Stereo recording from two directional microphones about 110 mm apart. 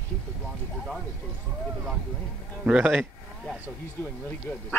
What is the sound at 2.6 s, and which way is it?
Speech, 10° right (ahead or behind).